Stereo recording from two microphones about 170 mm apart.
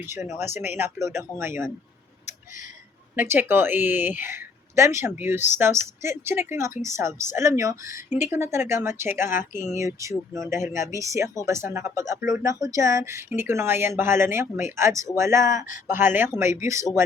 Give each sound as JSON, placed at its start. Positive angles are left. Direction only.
{"t": 0.0, "sound": "speech", "side_deg": -15}
{"t": 3.2, "sound": "speech", "side_deg": -10}
{"t": 15.4, "sound": "speech", "side_deg": 50}
{"t": 15.9, "sound": "speech", "side_deg": -10}